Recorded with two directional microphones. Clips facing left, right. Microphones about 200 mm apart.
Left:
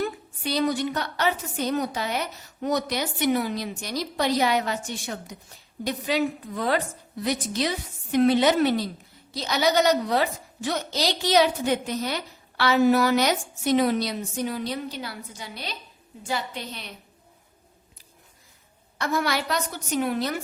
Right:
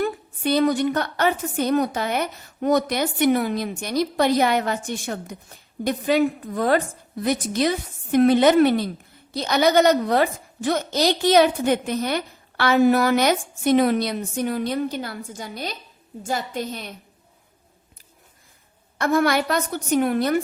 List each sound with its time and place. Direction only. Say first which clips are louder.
0.0 s a woman's voice: right 5 dB; 55° right (ahead or behind)
18.9 s a woman's voice: right 6 dB; 50° right (ahead or behind)